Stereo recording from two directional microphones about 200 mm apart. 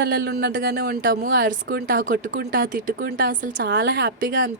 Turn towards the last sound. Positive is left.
turn(degrees=-50)  # may be behind; listen again after turning